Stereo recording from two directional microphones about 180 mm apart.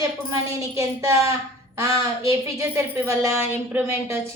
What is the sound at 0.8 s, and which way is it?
A woman's voice, 15° right (ahead or behind).